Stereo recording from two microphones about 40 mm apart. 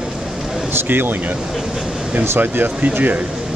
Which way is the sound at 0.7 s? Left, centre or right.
Right.